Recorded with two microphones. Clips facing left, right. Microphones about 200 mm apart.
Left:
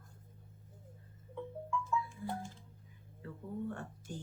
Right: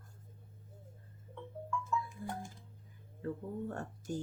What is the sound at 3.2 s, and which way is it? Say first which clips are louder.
Speech: right 2 dB; 45° right (ahead or behind).